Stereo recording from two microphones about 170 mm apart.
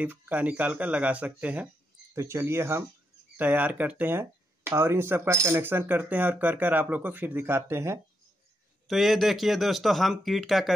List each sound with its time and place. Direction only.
0.0 s speech: 10° right (ahead or behind)
8.8 s speech: centre (ahead or behind)